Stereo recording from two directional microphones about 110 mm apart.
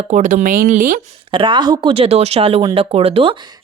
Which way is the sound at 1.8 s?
65° right (ahead or behind).